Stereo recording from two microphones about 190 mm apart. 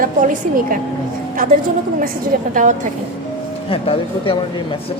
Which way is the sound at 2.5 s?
40° right (ahead or behind).